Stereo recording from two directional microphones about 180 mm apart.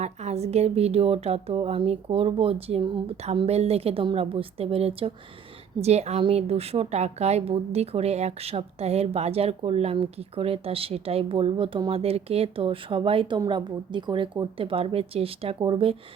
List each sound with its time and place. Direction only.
0.0 s a woman's voice: 40° right (ahead or behind)